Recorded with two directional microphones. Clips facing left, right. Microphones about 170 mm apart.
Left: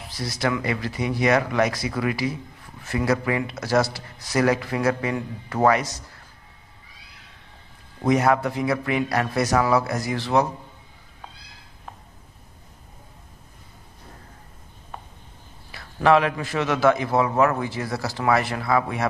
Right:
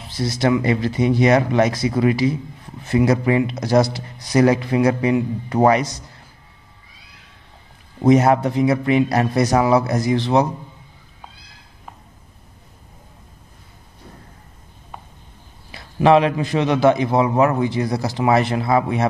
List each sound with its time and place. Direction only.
0.1 s a man's voice: 25° right (ahead or behind)
8.0 s a man's voice: 25° right (ahead or behind)
15.7 s a man's voice: 20° right (ahead or behind)